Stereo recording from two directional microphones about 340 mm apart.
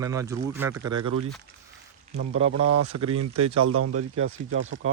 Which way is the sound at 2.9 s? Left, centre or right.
Right.